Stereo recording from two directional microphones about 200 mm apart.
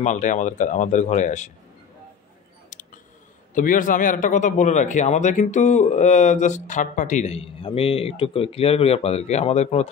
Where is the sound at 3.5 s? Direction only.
40° left (ahead or behind).